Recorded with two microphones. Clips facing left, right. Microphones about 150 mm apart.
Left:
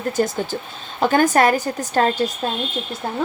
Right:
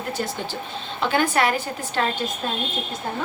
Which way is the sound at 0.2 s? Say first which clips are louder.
Left 7 dB; 45° left (ahead or behind).